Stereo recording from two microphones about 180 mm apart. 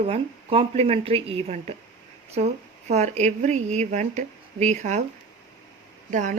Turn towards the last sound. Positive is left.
turn(degrees=-45)  # may be behind; listen again after turning